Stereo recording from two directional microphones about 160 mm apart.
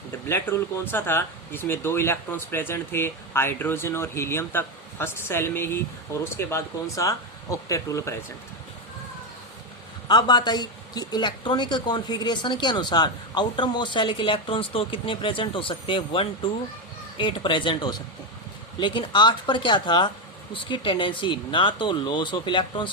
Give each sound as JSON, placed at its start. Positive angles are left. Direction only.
{"t": 0.3, "sound": "speech", "side_deg": 15}
{"t": 10.1, "sound": "speech", "side_deg": 25}